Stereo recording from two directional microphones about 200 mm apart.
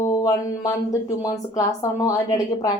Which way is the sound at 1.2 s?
15° left (ahead or behind).